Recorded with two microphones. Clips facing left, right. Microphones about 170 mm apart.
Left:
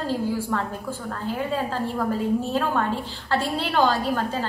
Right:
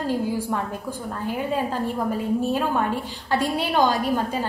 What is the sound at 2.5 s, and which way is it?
A woman's voice, 15° right (ahead or behind).